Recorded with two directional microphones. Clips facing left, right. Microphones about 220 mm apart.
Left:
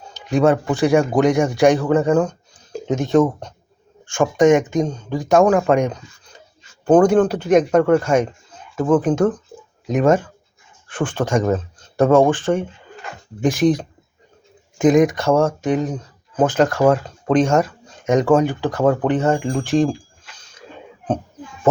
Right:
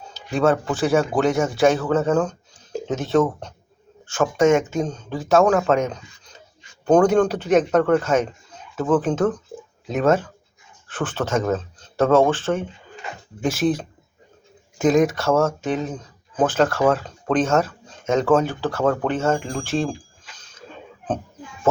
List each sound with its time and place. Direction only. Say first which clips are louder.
0.1 s speech: left 3 dB; 15° left (ahead or behind)